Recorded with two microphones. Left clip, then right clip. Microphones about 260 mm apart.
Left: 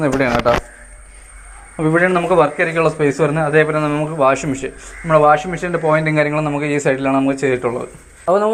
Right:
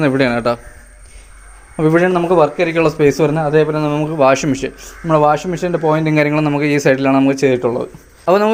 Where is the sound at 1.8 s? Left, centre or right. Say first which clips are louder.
Right 2 dB; right.